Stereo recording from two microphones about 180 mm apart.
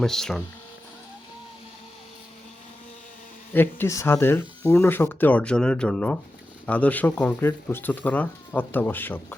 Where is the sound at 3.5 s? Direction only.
10° left (ahead or behind).